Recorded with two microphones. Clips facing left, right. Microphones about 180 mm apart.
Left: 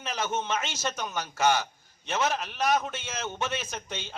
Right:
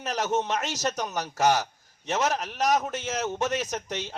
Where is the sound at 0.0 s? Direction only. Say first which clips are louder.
Right 4 dB; 40° right (ahead or behind).